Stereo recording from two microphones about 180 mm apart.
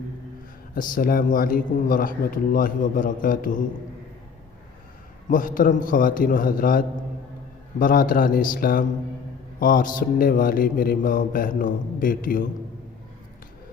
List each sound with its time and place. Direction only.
0.7 s a man's voice: 50° left (ahead or behind)
5.3 s a man's voice: 50° left (ahead or behind)